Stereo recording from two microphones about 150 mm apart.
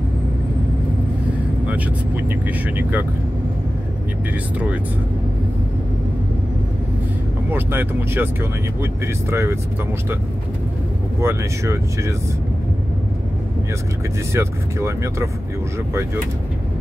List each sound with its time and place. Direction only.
1.7 s speech: 10° right (ahead or behind)
7.5 s speech: 15° right (ahead or behind)
11.1 s speech: 20° right (ahead or behind)
14.3 s speech: 20° right (ahead or behind)